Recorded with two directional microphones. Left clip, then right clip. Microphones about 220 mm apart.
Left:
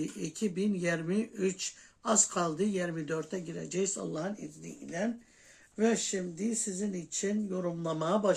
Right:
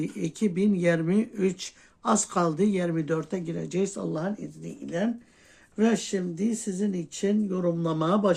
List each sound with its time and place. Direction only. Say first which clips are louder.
0.0 s speech: right 6 dB; 40° right (ahead or behind)